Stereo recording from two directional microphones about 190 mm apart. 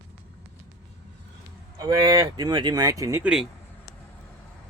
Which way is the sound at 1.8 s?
20° right (ahead or behind).